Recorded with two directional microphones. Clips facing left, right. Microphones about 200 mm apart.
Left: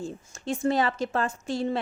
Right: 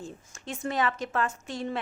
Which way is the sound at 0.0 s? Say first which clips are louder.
Left 6 dB; 30° left (ahead or behind).